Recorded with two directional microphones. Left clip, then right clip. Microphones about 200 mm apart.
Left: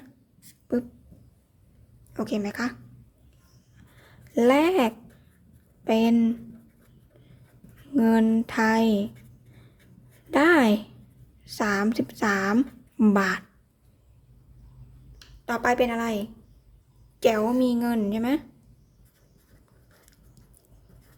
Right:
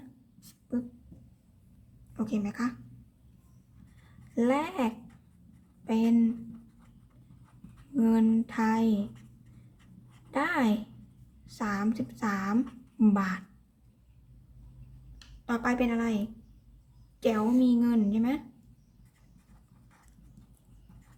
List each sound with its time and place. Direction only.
2.1 s a woman's voice: 40° left (ahead or behind)
4.4 s a woman's voice: 35° left (ahead or behind)
7.9 s a woman's voice: 35° left (ahead or behind)
10.3 s a woman's voice: 40° left (ahead or behind)
15.4 s a woman's voice: 45° left (ahead or behind)